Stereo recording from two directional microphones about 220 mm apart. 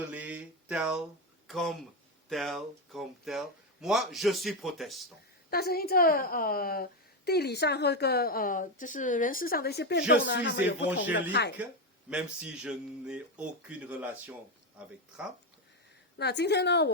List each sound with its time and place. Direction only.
0.1 s a sound: 5° right (ahead or behind)
1.5 s speech: centre (ahead or behind)
5.5 s a woman's voice: 45° left (ahead or behind)
12.1 s speech: 5° right (ahead or behind)
16.1 s a woman's voice: 50° left (ahead or behind)